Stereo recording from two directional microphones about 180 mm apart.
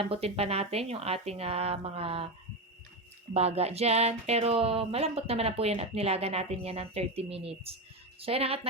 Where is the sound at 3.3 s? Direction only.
35° right (ahead or behind).